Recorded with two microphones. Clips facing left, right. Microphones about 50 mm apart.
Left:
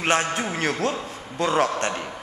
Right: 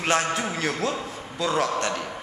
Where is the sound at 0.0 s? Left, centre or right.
Left.